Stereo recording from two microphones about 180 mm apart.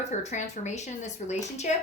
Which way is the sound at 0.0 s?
40° left (ahead or behind).